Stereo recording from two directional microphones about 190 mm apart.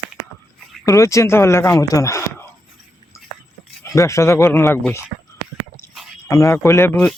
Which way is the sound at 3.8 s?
15° left (ahead or behind).